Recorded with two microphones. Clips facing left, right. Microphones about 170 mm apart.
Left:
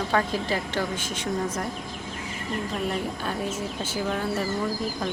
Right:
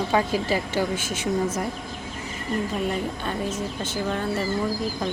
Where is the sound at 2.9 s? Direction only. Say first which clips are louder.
Right 1 dB; 5° left (ahead or behind).